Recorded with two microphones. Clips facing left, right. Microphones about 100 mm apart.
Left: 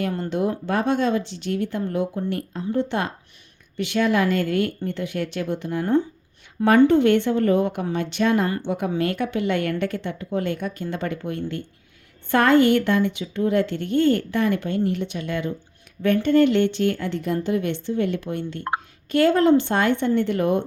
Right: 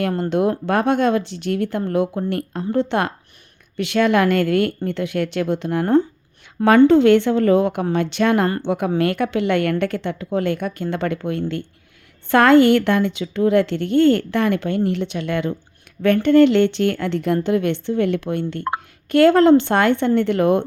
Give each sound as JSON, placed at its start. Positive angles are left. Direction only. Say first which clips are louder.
{"t": 0.0, "sound": "a woman's voice", "louder": "right 5 dB", "side_deg": -60}
{"t": 6.6, "sound": "speech", "louder": "right 4 dB", "side_deg": -80}
{"t": 7.9, "sound": "a woman's voice", "louder": "right 4 dB", "side_deg": -75}
{"t": 8.6, "sound": "a woman's voice", "louder": "right 4 dB", "side_deg": -80}
{"t": 8.9, "sound": "a woman's voice", "louder": "right 4 dB", "side_deg": -65}